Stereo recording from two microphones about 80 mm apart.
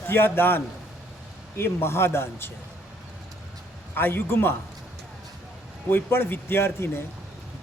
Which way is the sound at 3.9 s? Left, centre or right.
Left.